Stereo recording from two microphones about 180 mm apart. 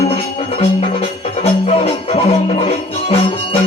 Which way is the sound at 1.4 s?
35° left (ahead or behind).